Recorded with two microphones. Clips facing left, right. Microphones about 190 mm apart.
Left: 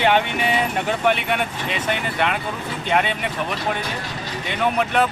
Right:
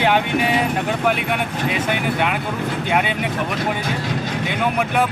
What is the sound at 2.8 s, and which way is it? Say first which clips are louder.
Speech: left 1 dB; 5° right (ahead or behind).